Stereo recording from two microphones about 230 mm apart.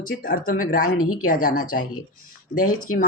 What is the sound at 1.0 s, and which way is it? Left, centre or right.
Speech, left.